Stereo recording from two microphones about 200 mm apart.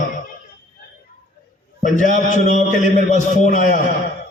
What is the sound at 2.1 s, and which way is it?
Speech, 35° left (ahead or behind).